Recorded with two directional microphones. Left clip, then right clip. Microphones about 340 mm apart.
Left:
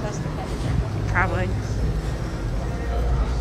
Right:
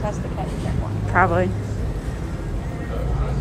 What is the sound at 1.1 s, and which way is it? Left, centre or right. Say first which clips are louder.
Speech: right 6 dB; centre.